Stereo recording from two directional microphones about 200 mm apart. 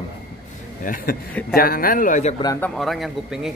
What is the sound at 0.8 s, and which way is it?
Speech, 45° left (ahead or behind).